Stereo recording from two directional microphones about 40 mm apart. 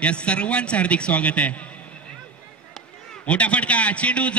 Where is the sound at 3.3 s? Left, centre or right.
Left.